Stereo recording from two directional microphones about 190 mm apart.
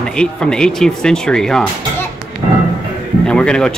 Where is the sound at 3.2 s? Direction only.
5° left (ahead or behind).